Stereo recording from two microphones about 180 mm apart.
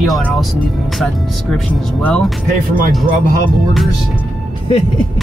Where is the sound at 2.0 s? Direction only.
5° left (ahead or behind).